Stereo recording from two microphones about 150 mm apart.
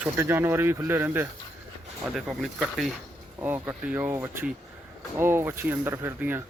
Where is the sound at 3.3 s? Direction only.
15° right (ahead or behind).